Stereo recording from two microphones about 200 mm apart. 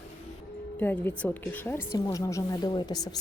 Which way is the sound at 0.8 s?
10° left (ahead or behind).